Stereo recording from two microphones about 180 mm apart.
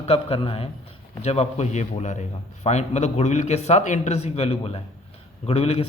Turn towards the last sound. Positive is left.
turn(degrees=35)  # may be behind; listen again after turning